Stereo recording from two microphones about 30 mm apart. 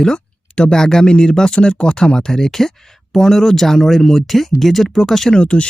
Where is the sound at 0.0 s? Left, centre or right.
Left.